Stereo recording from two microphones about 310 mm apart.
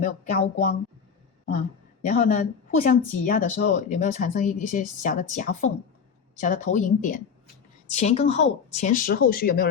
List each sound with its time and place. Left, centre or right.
0.0 s a woman's voice: left